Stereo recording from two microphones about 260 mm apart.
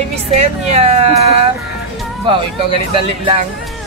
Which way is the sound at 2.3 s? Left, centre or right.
Centre.